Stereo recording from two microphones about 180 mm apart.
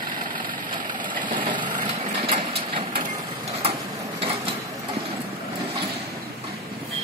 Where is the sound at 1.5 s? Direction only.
25° right (ahead or behind).